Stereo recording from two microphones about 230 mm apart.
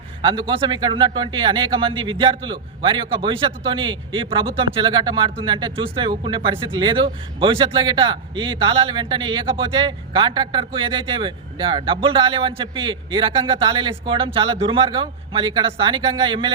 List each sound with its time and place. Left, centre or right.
0.2 s a man's voice: right